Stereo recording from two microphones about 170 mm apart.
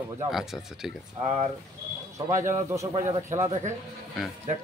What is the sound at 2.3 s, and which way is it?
Speech, 15° right (ahead or behind).